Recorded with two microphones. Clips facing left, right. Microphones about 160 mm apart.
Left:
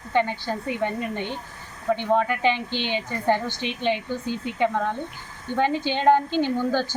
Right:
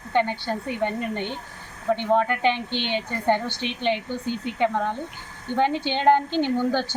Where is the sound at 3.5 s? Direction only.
65° right (ahead or behind).